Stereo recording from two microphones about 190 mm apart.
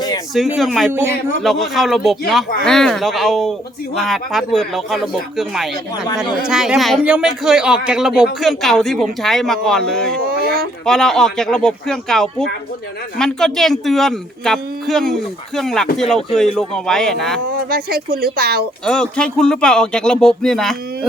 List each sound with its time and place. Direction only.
0.3 s speech: centre (ahead or behind)
10.2 s a sound: 50° right (ahead or behind)
10.8 s speech: centre (ahead or behind)
17.5 s speech: 50° right (ahead or behind)
18.9 s speech: 5° left (ahead or behind)